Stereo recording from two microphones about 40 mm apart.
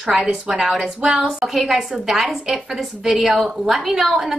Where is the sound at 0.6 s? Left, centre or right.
Centre.